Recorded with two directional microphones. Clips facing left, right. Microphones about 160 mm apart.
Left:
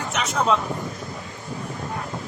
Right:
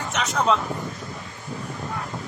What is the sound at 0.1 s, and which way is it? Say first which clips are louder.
Speech: right 1 dB; centre (ahead or behind).